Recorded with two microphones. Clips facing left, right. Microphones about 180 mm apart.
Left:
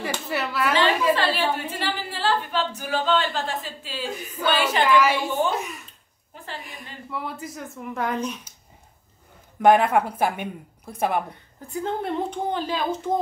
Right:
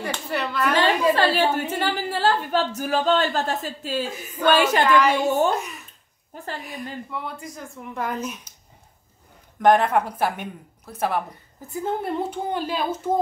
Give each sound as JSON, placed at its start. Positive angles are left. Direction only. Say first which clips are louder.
{"t": 0.0, "sound": "speech", "louder": "even", "side_deg": 5}
{"t": 0.7, "sound": "a woman's voice", "louder": "right 2 dB", "side_deg": -45}
{"t": 4.8, "sound": "a woman's voice", "louder": "left 3 dB", "side_deg": 5}
{"t": 5.1, "sound": "a woman's voice", "louder": "right 4 dB", "side_deg": -45}
{"t": 5.5, "sound": "speech", "louder": "right 2 dB", "side_deg": 0}
{"t": 6.3, "sound": "a woman's voice", "louder": "right 4 dB", "side_deg": -45}
{"t": 6.6, "sound": "speech", "louder": "right 7 dB", "side_deg": 0}
{"t": 9.6, "sound": "a woman's voice", "louder": "even", "side_deg": 10}
{"t": 11.7, "sound": "speech", "louder": "right 1 dB", "side_deg": -5}